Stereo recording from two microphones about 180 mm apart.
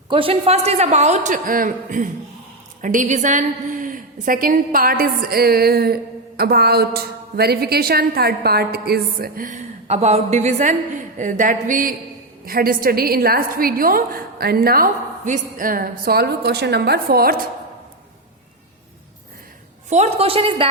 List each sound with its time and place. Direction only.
0.1 s a man's voice: 30° right (ahead or behind); by 9.6 s 50° right (ahead or behind)
9.8 s a man's voice: 35° right (ahead or behind); by 17.3 s 60° right (ahead or behind)
19.9 s a man's voice: 35° right (ahead or behind)